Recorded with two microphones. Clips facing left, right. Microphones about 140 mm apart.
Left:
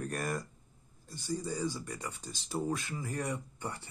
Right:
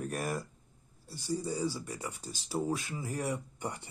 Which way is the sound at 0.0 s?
5° right (ahead or behind).